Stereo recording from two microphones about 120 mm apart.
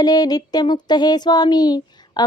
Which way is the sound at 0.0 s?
35° left (ahead or behind).